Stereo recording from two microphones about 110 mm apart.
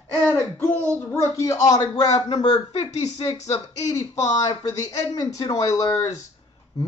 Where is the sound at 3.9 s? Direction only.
30° left (ahead or behind).